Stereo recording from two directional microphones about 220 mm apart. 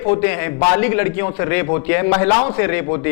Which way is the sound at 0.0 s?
15° left (ahead or behind).